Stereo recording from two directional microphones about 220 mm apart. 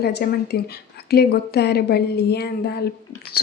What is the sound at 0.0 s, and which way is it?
Speech, 50° left (ahead or behind).